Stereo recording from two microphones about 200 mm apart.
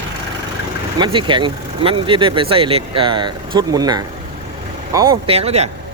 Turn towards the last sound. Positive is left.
turn(degrees=-30)  # may be behind; listen again after turning